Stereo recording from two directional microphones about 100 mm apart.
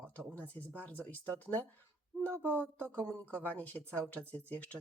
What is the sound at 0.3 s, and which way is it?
Speech, 15° left (ahead or behind).